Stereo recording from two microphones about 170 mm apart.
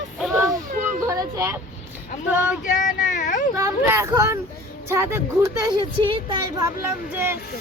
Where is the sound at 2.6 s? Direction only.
45° left (ahead or behind).